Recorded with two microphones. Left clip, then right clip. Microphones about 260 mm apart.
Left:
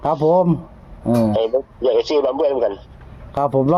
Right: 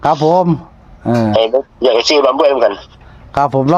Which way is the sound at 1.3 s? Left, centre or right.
Right.